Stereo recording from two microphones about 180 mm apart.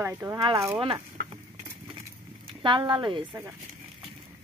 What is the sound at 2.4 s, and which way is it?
Speech, 25° right (ahead or behind).